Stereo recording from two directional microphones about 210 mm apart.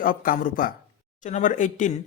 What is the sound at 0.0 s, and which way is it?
Speech, 40° left (ahead or behind).